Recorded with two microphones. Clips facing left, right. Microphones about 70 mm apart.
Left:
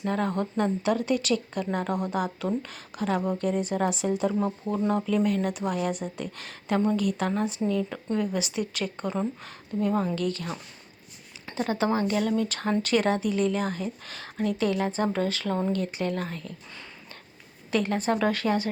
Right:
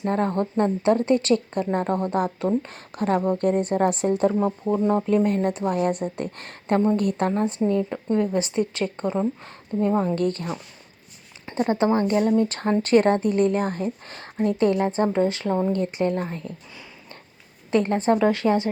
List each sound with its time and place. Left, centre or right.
0.0 s a woman's voice: right
10.2 s a woman's voice: right
11.5 s a sound: right
11.9 s a woman's voice: right
17.7 s a woman's voice: right
18.1 s a woman's voice: centre